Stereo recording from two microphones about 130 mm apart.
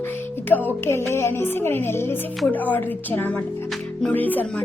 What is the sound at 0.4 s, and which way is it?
A woman's voice, 15° left (ahead or behind).